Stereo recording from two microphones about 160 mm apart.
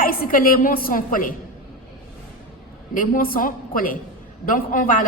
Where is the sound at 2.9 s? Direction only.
60° left (ahead or behind).